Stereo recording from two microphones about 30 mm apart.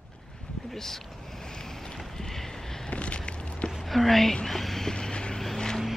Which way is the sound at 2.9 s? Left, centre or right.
Left.